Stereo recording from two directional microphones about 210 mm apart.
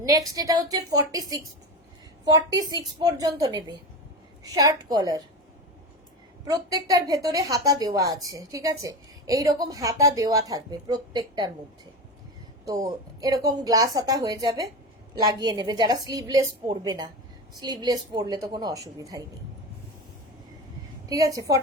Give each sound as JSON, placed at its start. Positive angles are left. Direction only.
{"t": 0.0, "sound": "a woman's voice", "side_deg": -15}
{"t": 6.4, "sound": "a woman's voice", "side_deg": -20}
{"t": 12.6, "sound": "a woman's voice", "side_deg": -15}
{"t": 21.1, "sound": "a woman's voice", "side_deg": -15}